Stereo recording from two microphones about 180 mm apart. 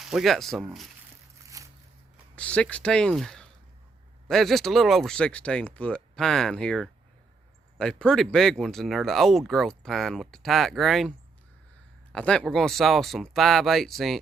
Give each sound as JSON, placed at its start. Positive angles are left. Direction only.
{"t": 0.0, "sound": "speech", "side_deg": 0}
{"t": 1.5, "sound": "a sound", "side_deg": -20}
{"t": 2.3, "sound": "speech", "side_deg": 5}
{"t": 12.1, "sound": "speech", "side_deg": 5}